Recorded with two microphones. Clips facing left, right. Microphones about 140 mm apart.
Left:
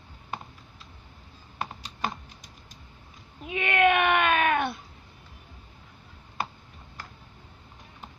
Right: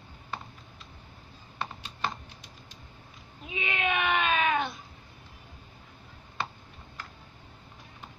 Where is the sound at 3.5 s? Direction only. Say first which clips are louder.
Left 9 dB; 60° left (ahead or behind).